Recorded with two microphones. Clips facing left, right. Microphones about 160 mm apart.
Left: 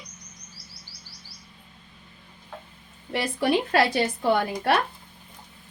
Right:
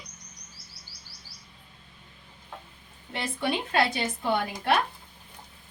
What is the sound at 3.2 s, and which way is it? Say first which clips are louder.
Speech: left 6 dB; 75° left (ahead or behind).